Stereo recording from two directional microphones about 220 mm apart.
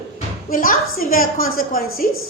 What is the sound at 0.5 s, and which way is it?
A woman's voice, 40° left (ahead or behind).